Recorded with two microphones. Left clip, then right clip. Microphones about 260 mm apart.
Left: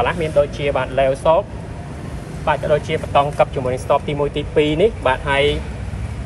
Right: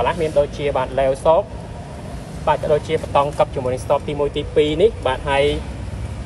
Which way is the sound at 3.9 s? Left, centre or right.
Centre.